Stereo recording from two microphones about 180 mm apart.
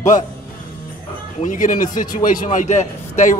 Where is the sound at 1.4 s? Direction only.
45° left (ahead or behind).